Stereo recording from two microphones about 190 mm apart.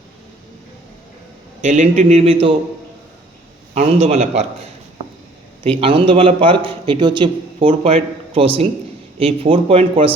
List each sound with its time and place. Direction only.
1.6 s speech: 40° right (ahead or behind)
3.8 s speech: 35° right (ahead or behind)
5.6 s a man's voice: 30° right (ahead or behind)